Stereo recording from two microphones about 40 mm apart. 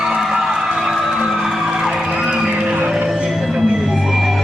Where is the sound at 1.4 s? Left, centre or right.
Centre.